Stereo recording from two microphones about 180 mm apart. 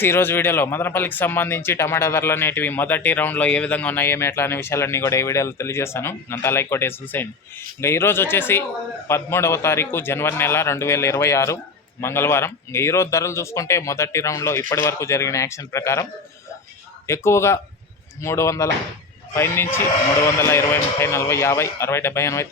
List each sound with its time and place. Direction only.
0.0 s speech: 10° left (ahead or behind)
17.1 s speech: 15° left (ahead or behind)